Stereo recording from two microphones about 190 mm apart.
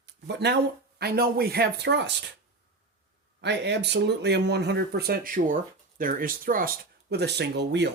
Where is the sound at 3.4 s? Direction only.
65° right (ahead or behind).